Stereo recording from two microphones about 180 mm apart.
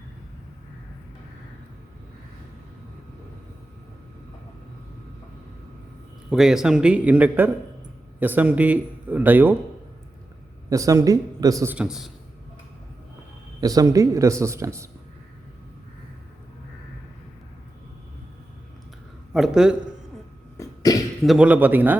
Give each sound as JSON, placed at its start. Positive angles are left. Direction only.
{"t": 6.3, "sound": "a man's voice", "side_deg": 0}
{"t": 10.7, "sound": "a man's voice", "side_deg": -20}
{"t": 13.6, "sound": "a man's voice", "side_deg": -20}
{"t": 19.3, "sound": "a man's voice", "side_deg": -5}
{"t": 20.6, "sound": "cough", "side_deg": 20}
{"t": 21.2, "sound": "a man's voice", "side_deg": -5}